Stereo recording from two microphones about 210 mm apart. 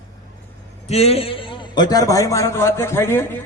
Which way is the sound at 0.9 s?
30° left (ahead or behind).